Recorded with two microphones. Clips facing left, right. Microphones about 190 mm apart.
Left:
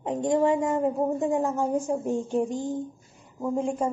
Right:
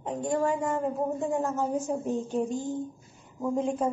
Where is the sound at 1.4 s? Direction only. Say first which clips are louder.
Left 3 dB; 15° left (ahead or behind).